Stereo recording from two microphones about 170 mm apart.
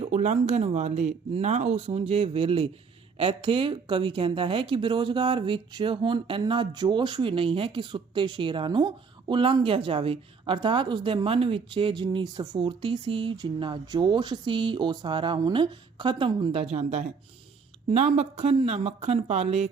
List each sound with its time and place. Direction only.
0.0 s speech: 45° right (ahead or behind)